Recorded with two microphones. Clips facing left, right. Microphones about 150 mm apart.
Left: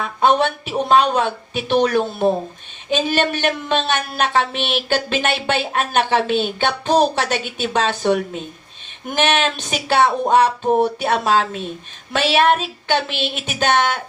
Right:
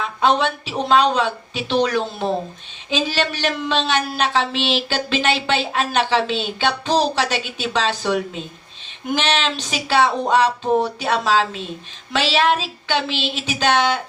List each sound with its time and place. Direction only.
0.0 s speech: 55° left (ahead or behind)